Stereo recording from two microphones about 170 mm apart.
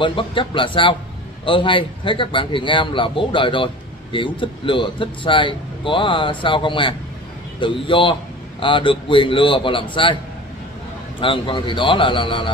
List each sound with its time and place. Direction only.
0.0 s a man's voice: 30° left (ahead or behind)
11.1 s a man's voice: 30° left (ahead or behind)